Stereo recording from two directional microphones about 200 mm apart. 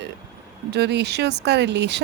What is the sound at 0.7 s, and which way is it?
Speech, 55° right (ahead or behind).